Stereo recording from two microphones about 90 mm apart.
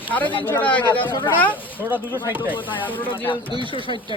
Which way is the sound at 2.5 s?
70° left (ahead or behind).